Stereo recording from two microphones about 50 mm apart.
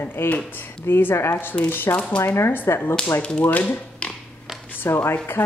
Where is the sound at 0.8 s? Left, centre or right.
Left.